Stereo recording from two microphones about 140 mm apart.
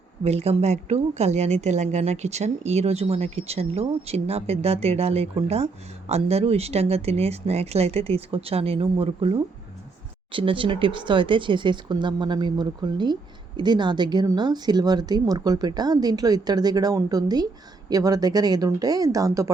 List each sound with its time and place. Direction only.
0.3 s speech: 50° right (ahead or behind); by 19.5 s 25° right (ahead or behind)